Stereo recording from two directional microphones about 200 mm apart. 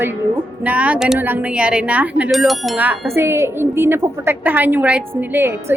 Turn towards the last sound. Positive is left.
turn(degrees=-10)  # may be behind; listen again after turning